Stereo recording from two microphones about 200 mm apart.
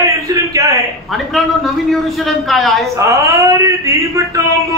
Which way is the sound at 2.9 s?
15° right (ahead or behind).